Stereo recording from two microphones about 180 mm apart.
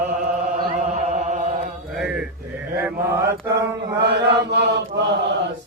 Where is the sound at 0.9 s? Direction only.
40° right (ahead or behind).